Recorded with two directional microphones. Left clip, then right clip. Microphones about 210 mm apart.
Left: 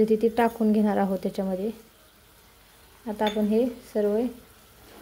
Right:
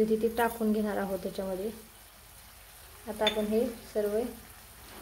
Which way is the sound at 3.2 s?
40° left (ahead or behind).